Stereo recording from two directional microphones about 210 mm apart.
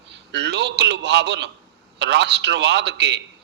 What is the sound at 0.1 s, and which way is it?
A man's voice, 55° right (ahead or behind).